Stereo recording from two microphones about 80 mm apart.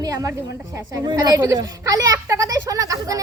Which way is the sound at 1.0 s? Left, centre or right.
Right.